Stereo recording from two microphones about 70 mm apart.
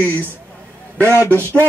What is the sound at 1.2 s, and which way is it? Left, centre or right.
Speech, right.